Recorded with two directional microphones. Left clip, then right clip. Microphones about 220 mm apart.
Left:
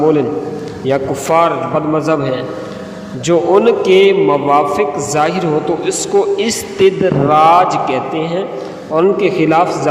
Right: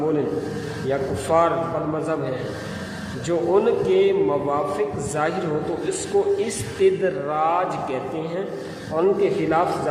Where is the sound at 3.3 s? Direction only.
35° left (ahead or behind).